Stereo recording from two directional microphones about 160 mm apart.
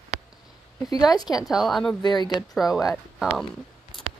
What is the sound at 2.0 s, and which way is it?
Speech, 25° left (ahead or behind).